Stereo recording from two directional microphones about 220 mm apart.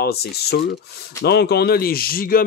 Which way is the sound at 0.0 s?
45° left (ahead or behind).